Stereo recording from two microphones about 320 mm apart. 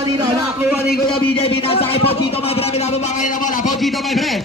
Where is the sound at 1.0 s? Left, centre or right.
Centre.